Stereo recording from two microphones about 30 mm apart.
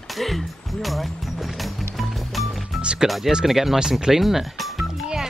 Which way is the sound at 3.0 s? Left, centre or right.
Centre.